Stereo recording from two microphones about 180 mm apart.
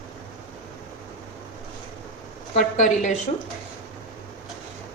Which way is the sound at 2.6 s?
45° left (ahead or behind).